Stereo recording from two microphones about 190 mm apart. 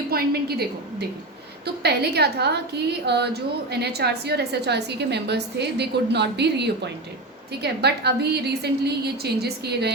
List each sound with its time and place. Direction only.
0.1 s a woman's voice: 55° right (ahead or behind)